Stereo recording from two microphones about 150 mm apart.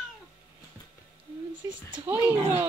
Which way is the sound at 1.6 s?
25° right (ahead or behind).